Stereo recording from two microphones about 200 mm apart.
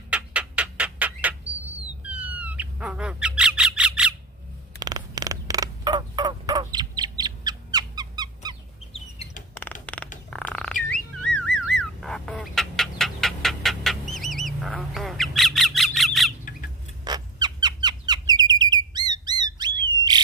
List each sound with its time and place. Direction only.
0.1 s bird: 5° right (ahead or behind)
4.8 s crow: 20° right (ahead or behind)
8.9 s chicken: 30° left (ahead or behind)
9.8 s a sound: 5° left (ahead or behind)
10.2 s bird: 5° left (ahead or behind)
11.2 s car alarm: 5° left (ahead or behind)
11.8 s bird: 5° left (ahead or behind)
14.1 s duck: centre (ahead or behind)
17.0 s bird: 20° right (ahead or behind)